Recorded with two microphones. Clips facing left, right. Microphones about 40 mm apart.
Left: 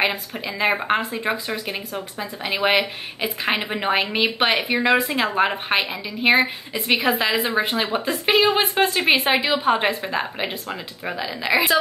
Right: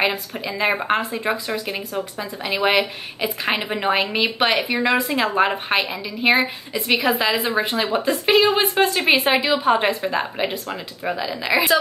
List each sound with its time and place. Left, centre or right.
0.0 s a woman's voice: centre